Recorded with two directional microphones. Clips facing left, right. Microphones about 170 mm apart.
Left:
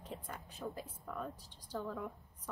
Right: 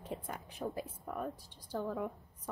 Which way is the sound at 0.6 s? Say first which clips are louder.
Right 4 dB; 30° right (ahead or behind).